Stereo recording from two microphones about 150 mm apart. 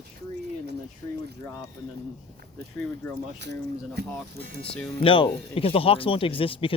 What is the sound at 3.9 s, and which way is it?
Speech, 90° right.